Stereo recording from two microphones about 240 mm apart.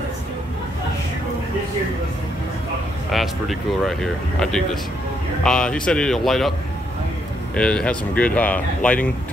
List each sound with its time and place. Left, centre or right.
3.1 s speech: centre
7.5 s speech: centre